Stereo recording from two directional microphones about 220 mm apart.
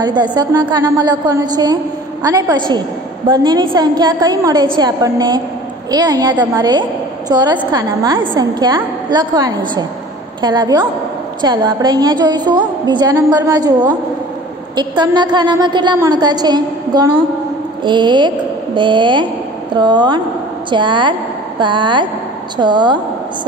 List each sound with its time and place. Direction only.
0.0 s a woman's voice: 20° right (ahead or behind)